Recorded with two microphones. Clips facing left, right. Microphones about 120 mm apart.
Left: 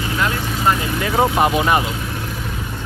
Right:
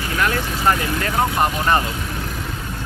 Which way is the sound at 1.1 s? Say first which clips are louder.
Left 5 dB; 10° left (ahead or behind).